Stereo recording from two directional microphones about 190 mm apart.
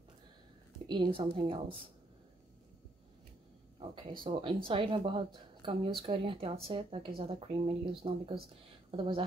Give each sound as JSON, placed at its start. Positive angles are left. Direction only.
{"t": 0.8, "sound": "speech", "side_deg": -25}
{"t": 3.9, "sound": "speech", "side_deg": -25}